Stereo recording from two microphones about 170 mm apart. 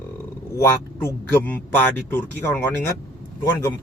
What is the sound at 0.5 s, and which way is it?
A man's voice, 20° left (ahead or behind).